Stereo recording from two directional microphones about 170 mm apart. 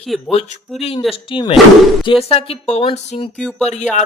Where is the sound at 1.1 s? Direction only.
30° left (ahead or behind).